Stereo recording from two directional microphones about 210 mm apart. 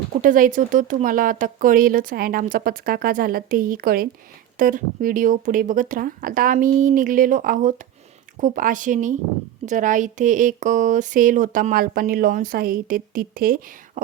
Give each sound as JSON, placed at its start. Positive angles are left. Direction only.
{"t": 0.2, "sound": "speech", "side_deg": -40}